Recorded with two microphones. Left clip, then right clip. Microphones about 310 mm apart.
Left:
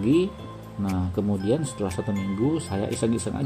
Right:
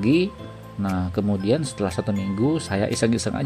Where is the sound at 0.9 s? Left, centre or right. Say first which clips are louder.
Right 2 dB; right.